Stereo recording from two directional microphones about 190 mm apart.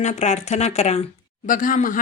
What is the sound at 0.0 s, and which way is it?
Speech, 35° left (ahead or behind).